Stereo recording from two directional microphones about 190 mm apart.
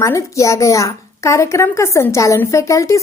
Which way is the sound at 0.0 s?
15° left (ahead or behind).